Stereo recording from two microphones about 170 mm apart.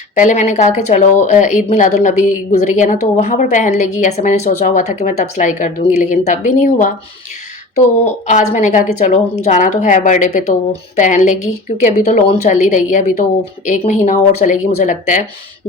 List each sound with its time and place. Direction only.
0.2 s speech: 45° left (ahead or behind)